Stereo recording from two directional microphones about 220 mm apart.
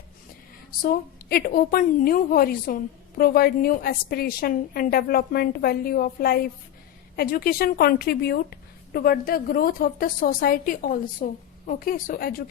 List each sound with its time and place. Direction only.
1.3 s a woman's voice: 40° left (ahead or behind)